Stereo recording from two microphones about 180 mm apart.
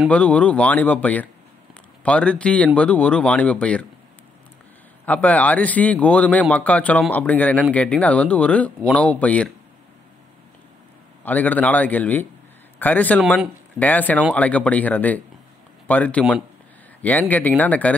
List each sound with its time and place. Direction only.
0.1 s speech: 5° left (ahead or behind)
5.0 s speech: 10° left (ahead or behind)
11.2 s a man's voice: 10° left (ahead or behind)